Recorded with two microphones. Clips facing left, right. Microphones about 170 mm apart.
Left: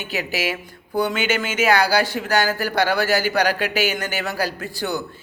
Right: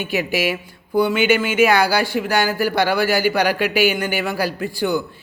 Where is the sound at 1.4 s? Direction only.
40° left (ahead or behind).